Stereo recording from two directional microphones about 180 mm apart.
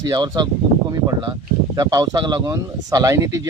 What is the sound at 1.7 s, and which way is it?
Speech, 20° right (ahead or behind).